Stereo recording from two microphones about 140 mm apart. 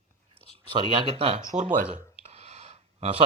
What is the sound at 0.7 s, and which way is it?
Speech, 40° right (ahead or behind).